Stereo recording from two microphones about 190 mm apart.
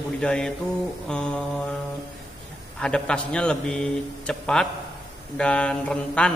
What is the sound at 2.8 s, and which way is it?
Speech, 5° left (ahead or behind).